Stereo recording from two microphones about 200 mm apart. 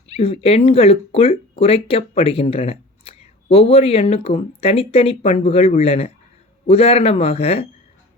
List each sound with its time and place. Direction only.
0.1 s speech: 30° left (ahead or behind)